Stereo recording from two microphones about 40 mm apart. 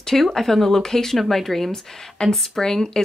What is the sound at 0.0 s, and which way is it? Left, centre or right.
Speech, centre.